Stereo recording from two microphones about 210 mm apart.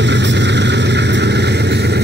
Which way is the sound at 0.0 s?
55° right (ahead or behind).